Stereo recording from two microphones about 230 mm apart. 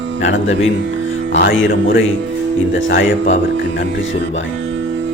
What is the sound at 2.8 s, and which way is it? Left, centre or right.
Speech, left.